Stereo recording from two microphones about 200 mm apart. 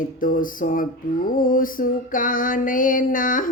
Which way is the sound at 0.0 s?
45° left (ahead or behind).